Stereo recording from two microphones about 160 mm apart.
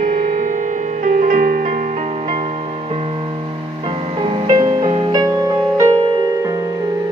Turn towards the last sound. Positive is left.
turn(degrees=-20)  # may be behind; listen again after turning